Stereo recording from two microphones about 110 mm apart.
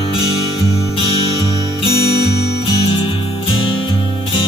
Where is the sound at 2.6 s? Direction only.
50° left (ahead or behind).